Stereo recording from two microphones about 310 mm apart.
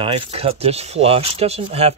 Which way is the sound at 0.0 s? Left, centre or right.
Centre.